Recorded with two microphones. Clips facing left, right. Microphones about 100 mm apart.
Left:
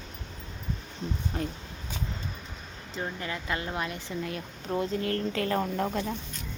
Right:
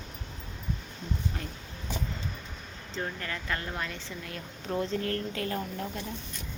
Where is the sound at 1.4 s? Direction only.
30° left (ahead or behind).